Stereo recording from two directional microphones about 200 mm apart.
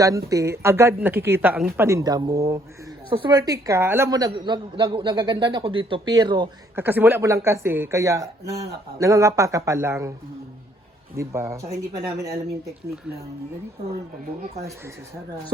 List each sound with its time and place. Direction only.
0.3 s a woman's voice: 15° right (ahead or behind)
6.7 s speech: 10° right (ahead or behind)
11.2 s speech: 15° right (ahead or behind)